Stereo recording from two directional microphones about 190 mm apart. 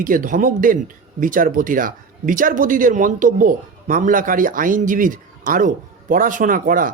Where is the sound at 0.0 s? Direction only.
45° right (ahead or behind).